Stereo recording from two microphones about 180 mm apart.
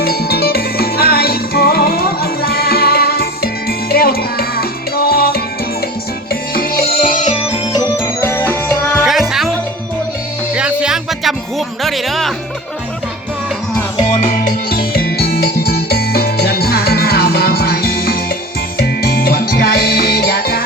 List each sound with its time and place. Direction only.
0.0 s music: 60° left (ahead or behind)
6.5 s music: 55° left (ahead or behind)
7.3 s music: 35° left (ahead or behind)
7.7 s music: 20° left (ahead or behind)
9.0 s music: centre (ahead or behind)
10.5 s music: 5° right (ahead or behind)
14.1 s music: 35° left (ahead or behind)
14.7 s music: 55° left (ahead or behind)